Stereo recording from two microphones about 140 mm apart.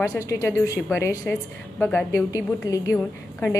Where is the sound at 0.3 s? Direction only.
20° left (ahead or behind).